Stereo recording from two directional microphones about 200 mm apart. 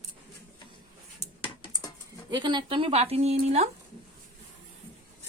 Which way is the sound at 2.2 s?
25° right (ahead or behind).